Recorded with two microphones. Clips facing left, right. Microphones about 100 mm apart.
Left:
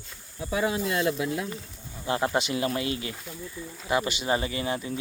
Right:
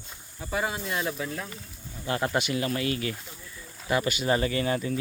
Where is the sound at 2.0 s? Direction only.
20° left (ahead or behind).